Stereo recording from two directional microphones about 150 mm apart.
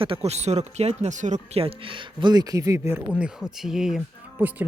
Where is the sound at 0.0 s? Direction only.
40° right (ahead or behind).